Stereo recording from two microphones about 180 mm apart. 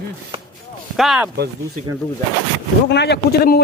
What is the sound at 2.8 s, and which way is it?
Speech, 70° left (ahead or behind).